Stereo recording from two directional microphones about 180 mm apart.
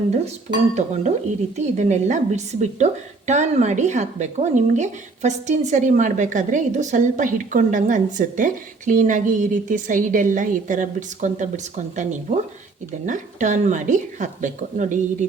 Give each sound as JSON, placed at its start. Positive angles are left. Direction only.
{"t": 0.1, "sound": "a woman's voice", "side_deg": -40}